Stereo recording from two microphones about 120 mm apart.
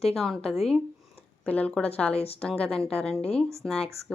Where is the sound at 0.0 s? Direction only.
Centre (ahead or behind).